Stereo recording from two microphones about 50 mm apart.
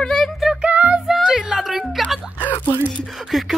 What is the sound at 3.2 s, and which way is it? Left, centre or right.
Speech, centre.